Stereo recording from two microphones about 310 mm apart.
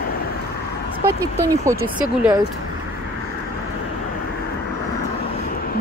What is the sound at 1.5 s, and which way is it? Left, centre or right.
Speech, centre.